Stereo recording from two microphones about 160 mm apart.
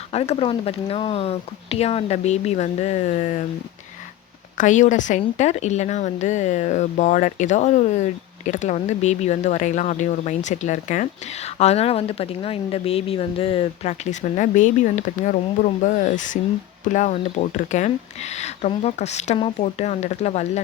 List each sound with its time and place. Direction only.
0.1 s speech: 40° left (ahead or behind)
4.5 s speech: 50° left (ahead or behind)
11.6 s speech: 40° left (ahead or behind)